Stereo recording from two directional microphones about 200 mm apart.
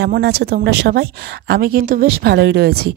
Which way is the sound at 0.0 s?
55° right (ahead or behind).